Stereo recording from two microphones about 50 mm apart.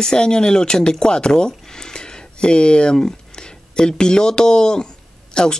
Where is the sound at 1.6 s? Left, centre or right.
Centre.